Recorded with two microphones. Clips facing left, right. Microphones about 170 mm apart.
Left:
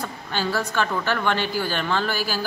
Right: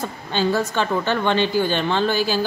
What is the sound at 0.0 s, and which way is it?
A woman's voice, 20° right (ahead or behind).